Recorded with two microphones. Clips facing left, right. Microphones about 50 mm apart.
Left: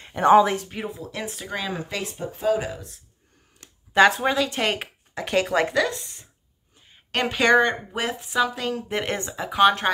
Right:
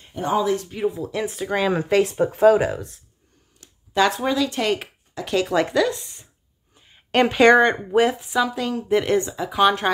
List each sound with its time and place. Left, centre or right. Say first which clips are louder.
0.0 s speech: left 7 dB; left
0.6 s speech: right 7 dB; centre
0.9 s speech: right 7 dB; centre
1.7 s speech: right 11 dB; right
3.9 s speech: left 2 dB; left
5.5 s a woman's voice: right 4 dB; centre
5.9 s a woman's voice: right 4 dB; centre
8.4 s a woman's voice: even; centre